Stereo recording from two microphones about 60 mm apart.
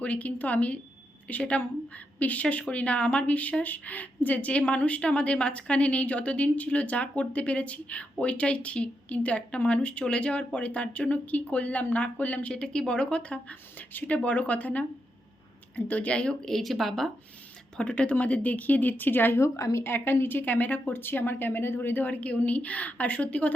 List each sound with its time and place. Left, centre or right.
0.0 s a woman's voice: left
16.6 s speech: centre
17.7 s a woman's voice: centre
19.4 s a woman's voice: left
19.8 s speech: left